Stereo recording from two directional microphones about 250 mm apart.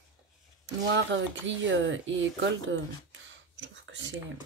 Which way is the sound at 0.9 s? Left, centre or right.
Right.